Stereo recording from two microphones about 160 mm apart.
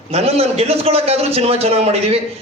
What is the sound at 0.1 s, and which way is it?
A man's voice, 40° right (ahead or behind).